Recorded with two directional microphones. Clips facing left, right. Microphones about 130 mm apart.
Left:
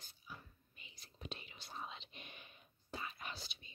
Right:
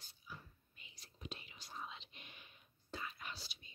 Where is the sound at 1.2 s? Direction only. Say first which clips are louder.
Left 1 dB; 30° left (ahead or behind).